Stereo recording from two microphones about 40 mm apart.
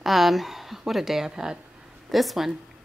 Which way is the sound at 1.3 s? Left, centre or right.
Centre.